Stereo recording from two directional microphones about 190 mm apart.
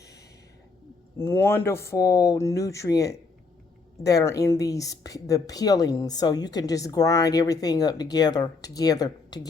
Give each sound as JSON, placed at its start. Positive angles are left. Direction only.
{"t": 1.2, "sound": "speech", "side_deg": 15}